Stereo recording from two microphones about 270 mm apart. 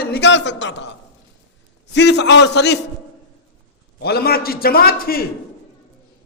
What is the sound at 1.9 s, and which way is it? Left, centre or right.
Speech, left.